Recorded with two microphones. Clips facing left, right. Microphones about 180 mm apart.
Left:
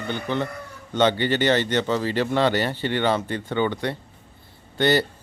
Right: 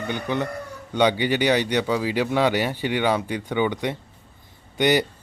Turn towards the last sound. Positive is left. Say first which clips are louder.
# even
turn(degrees=-15)  # may be behind; listen again after turning